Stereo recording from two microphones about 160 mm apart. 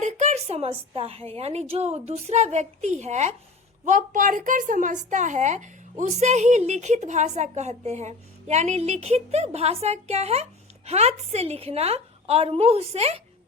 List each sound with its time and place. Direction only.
0.0 s a woman's voice: 45° right (ahead or behind)